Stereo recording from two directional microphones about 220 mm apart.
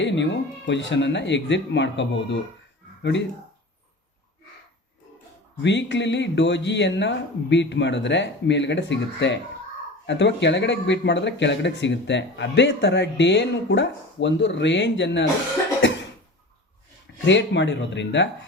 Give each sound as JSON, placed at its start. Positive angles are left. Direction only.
{"t": 0.0, "sound": "speech", "side_deg": 55}
{"t": 5.6, "sound": "speech", "side_deg": 55}
{"t": 17.2, "sound": "speech", "side_deg": 55}